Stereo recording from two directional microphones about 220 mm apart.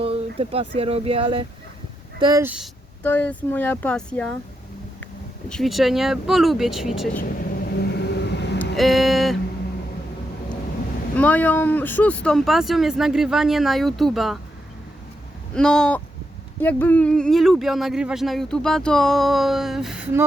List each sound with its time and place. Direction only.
0.0 s speech: 25° right (ahead or behind)
2.2 s speech: 10° right (ahead or behind)
3.0 s speech: 5° left (ahead or behind)
5.5 s speech: centre (ahead or behind)
7.8 s vehicle: 50° left (ahead or behind)
8.7 s speech: centre (ahead or behind)
11.2 s speech: 5° left (ahead or behind)
15.5 s speech: 5° left (ahead or behind)